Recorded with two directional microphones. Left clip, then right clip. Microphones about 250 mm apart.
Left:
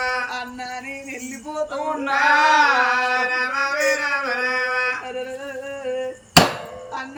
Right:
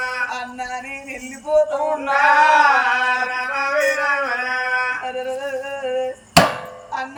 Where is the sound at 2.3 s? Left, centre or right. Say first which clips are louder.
Right 2 dB; centre.